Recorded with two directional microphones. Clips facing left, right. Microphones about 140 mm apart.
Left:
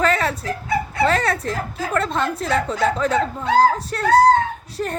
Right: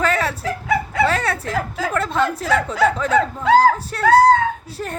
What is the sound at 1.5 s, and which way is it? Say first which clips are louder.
Speech: right 4 dB; 90° right.